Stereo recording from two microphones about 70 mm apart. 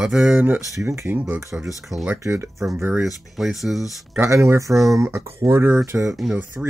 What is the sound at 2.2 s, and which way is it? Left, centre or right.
Speech, right.